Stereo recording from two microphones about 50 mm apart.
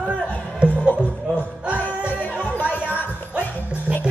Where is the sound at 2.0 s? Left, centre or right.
Right.